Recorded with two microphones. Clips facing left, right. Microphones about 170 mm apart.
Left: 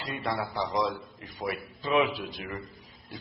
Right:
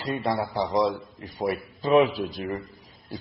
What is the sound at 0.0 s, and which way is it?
A man's voice, 35° right (ahead or behind).